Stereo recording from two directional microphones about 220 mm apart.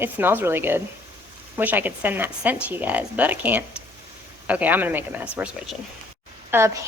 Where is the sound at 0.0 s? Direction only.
10° right (ahead or behind).